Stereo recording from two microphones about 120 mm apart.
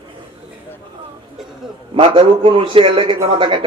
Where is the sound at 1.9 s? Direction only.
45° right (ahead or behind).